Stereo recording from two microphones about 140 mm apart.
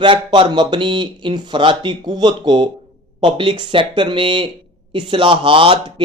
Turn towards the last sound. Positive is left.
turn(degrees=-40)  # may be behind; listen again after turning